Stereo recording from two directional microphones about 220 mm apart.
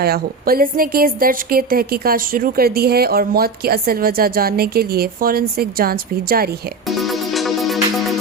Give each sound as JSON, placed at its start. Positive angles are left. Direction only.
{"t": 0.0, "sound": "a woman's voice", "side_deg": -45}
{"t": 6.8, "sound": "music", "side_deg": 0}